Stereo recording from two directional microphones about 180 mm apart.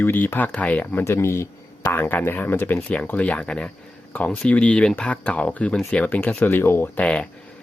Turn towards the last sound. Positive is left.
turn(degrees=5)  # may be behind; listen again after turning